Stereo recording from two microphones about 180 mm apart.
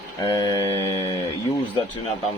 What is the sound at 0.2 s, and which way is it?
Speech, 20° left (ahead or behind).